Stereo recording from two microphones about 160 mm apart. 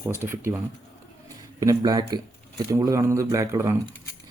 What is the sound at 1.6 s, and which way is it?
A man's voice, 25° right (ahead or behind).